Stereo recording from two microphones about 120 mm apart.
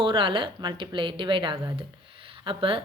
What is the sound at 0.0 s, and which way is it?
A woman's voice, 45° right (ahead or behind).